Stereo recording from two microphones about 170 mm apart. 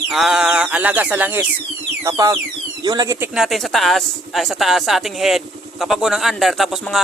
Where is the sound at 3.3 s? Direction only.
Centre (ahead or behind).